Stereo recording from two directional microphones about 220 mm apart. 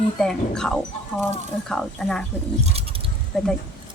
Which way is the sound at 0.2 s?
5° left (ahead or behind).